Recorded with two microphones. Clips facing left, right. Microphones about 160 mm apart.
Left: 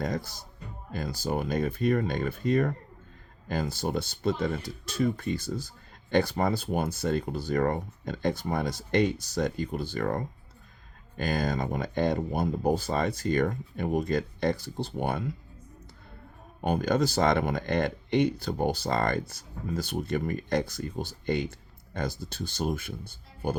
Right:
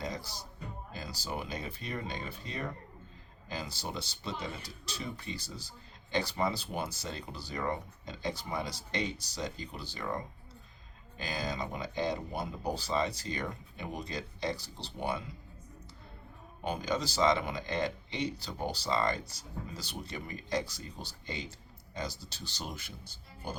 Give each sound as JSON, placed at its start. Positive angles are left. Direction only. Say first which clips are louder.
{"t": 0.0, "sound": "speech", "louder": "left 7 dB", "side_deg": 55}
{"t": 16.6, "sound": "speech", "louder": "left 8 dB", "side_deg": 55}